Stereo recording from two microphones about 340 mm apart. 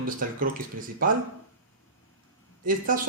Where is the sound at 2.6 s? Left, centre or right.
Right.